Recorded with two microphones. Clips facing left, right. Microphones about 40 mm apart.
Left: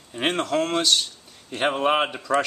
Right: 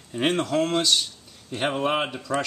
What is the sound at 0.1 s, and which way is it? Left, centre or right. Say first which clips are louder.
A man's voice: even; centre.